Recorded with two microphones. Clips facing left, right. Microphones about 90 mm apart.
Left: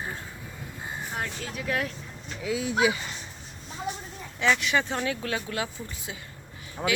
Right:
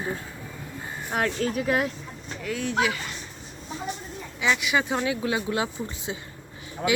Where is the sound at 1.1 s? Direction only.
65° right (ahead or behind).